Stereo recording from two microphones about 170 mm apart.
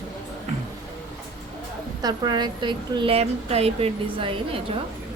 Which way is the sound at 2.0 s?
25° right (ahead or behind).